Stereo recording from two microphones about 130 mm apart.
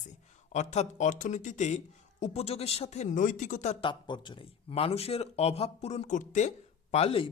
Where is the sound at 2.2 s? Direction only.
55° left (ahead or behind).